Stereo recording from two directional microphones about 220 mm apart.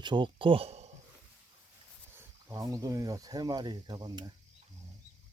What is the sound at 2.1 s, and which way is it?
Speech, 15° right (ahead or behind).